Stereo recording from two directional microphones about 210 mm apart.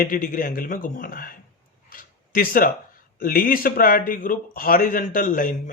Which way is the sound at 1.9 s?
40° left (ahead or behind).